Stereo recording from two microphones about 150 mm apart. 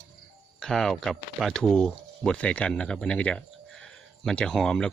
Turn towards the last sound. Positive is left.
turn(degrees=5)  # may be behind; listen again after turning